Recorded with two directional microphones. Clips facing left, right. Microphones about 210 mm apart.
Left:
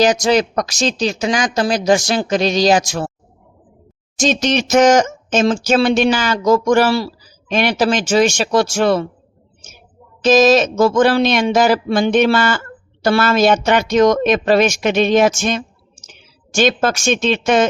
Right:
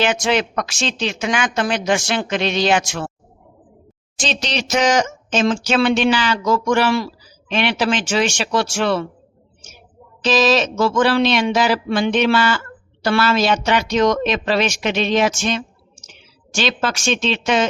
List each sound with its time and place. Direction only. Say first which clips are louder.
0.0 s speech: left 5 dB; 40° left (ahead or behind)
4.2 s speech: left 8 dB; 45° left (ahead or behind)
10.2 s speech: left 5 dB; 45° left (ahead or behind)